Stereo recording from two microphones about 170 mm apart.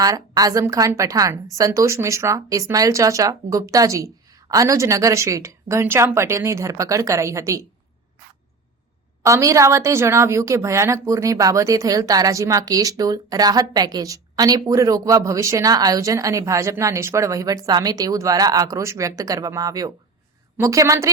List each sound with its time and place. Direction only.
0.0 s a woman's voice: 20° right (ahead or behind)
9.2 s a woman's voice: 20° right (ahead or behind)